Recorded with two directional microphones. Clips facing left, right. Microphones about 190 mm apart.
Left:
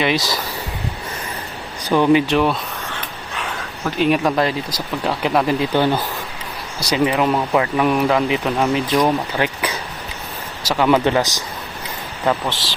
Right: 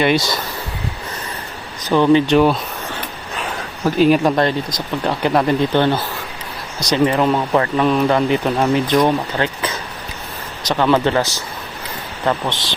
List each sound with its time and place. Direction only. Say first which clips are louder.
0.0 s speech: right 3 dB; centre (ahead or behind)
1.8 s speech: right 1 dB; 10° left (ahead or behind)
2.3 s speech: right 4 dB; centre (ahead or behind)
4.0 s speech: right 3 dB; centre (ahead or behind)
9.4 s speech: even; 10° left (ahead or behind)
12.2 s speech: even; 5° left (ahead or behind)